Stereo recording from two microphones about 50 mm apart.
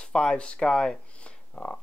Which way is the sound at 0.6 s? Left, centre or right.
Centre.